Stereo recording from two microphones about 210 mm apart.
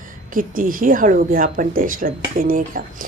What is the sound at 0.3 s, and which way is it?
Speech, 40° right (ahead or behind).